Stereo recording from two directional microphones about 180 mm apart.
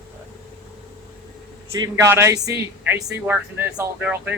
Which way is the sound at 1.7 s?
15° right (ahead or behind).